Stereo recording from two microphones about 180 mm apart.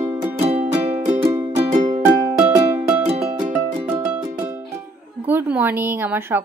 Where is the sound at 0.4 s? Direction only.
35° right (ahead or behind).